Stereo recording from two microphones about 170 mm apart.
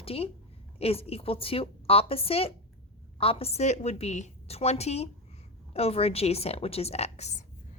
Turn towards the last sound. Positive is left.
turn(degrees=40)  # may be behind; listen again after turning